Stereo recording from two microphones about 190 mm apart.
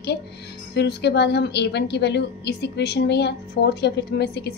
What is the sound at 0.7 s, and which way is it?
A woman's voice, 60° left (ahead or behind).